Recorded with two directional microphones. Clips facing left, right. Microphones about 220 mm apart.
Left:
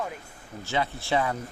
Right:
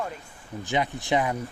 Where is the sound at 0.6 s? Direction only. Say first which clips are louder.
Right 2 dB; 15° right (ahead or behind).